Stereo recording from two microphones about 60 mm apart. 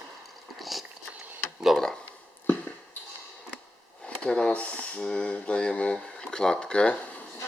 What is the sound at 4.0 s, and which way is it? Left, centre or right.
Speech, centre.